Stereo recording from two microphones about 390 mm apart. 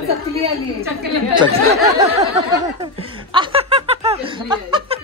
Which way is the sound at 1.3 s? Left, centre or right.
Centre.